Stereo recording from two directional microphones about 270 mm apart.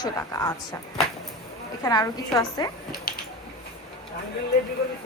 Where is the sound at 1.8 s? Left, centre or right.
Centre.